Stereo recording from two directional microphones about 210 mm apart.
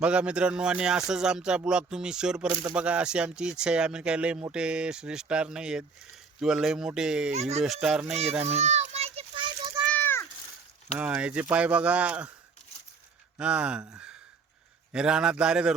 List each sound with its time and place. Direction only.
0.0 s speech: 5° right (ahead or behind)
7.3 s speech: 30° right (ahead or behind)
7.6 s speech: 5° right (ahead or behind)
8.1 s children playing: 30° right (ahead or behind)
9.9 s a sound: 10° left (ahead or behind)
10.9 s speech: 5° right (ahead or behind)
13.3 s speech: 5° right (ahead or behind)